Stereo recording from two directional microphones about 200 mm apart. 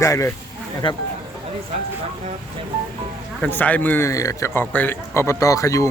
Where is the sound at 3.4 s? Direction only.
10° left (ahead or behind).